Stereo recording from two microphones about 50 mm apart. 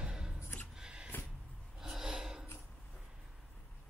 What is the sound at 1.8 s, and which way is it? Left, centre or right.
Gasp, centre.